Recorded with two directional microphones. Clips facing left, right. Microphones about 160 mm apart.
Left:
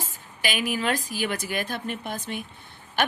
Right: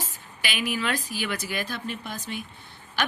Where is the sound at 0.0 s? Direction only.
45° left (ahead or behind).